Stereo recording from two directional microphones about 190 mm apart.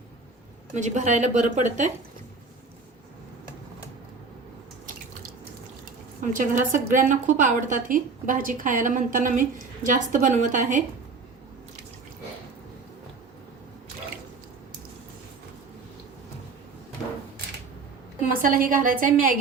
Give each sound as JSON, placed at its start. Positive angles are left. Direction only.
{"t": 0.7, "sound": "a woman's voice", "side_deg": -40}
{"t": 6.3, "sound": "a woman's voice", "side_deg": -45}
{"t": 18.4, "sound": "a woman's voice", "side_deg": -45}